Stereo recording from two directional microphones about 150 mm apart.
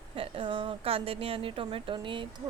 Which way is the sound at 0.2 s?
35° right (ahead or behind).